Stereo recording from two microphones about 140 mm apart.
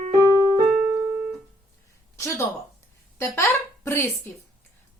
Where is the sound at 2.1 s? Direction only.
20° left (ahead or behind).